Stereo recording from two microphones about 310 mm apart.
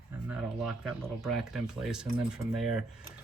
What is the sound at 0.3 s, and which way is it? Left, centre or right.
Speech, centre.